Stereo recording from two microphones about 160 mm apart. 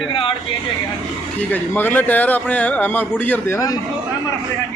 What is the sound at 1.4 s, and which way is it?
Speech, 10° left (ahead or behind).